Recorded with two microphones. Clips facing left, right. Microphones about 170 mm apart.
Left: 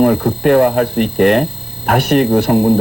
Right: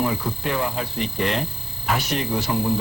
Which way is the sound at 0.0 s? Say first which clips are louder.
Left 13 dB; 60° left (ahead or behind).